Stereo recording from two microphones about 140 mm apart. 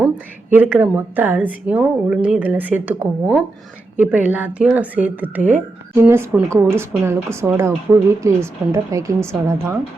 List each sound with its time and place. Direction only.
0.5 s a woman's voice: 15° right (ahead or behind)